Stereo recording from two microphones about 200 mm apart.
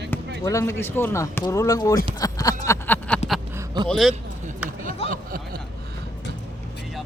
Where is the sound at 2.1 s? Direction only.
20° left (ahead or behind).